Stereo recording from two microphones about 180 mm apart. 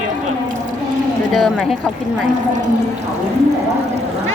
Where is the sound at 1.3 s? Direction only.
Centre (ahead or behind).